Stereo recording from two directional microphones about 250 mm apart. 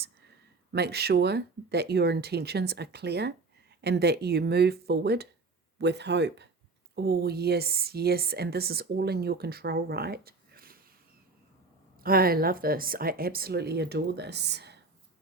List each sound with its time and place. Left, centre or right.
0.7 s speech: right
12.0 s speech: right